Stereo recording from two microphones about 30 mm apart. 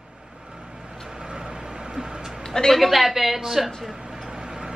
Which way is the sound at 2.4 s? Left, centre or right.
Centre.